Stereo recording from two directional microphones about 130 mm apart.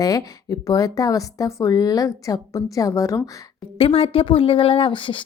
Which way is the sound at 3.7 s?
45° left (ahead or behind).